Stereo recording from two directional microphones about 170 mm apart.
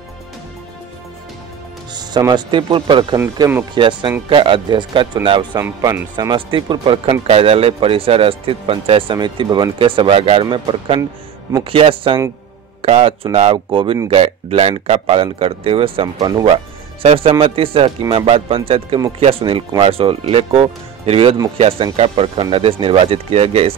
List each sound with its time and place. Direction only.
2.0 s speech: 25° right (ahead or behind)
3.3 s speech: 15° right (ahead or behind)
3.7 s speech: 30° right (ahead or behind)
5.6 s speech: 20° right (ahead or behind); by 23.7 s 35° right (ahead or behind)